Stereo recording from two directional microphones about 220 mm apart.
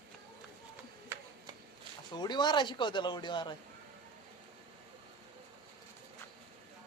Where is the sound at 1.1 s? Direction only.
10° right (ahead or behind).